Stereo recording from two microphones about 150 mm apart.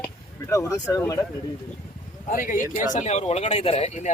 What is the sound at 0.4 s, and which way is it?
Speech, 20° left (ahead or behind).